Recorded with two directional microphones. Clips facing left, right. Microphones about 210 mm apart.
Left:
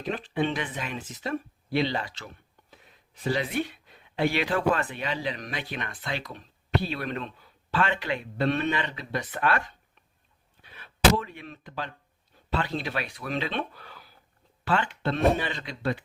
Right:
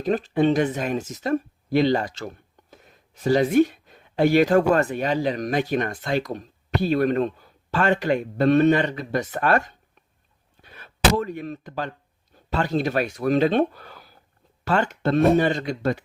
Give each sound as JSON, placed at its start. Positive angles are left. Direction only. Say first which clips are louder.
{"t": 0.0, "sound": "speech", "louder": "right 8 dB", "side_deg": -40}